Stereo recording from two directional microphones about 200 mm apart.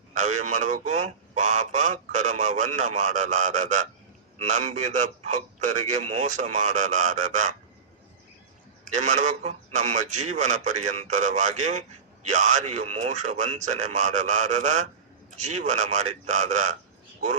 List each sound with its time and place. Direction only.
0.1 s speech: 35° right (ahead or behind)
8.9 s speech: 35° right (ahead or behind)